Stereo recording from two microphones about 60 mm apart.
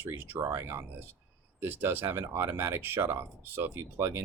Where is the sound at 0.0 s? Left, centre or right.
Right.